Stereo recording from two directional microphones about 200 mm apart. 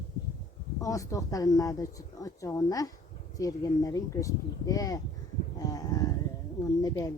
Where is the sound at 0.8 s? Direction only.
15° left (ahead or behind).